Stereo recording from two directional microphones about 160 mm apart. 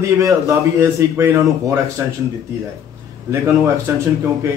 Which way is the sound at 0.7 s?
15° right (ahead or behind).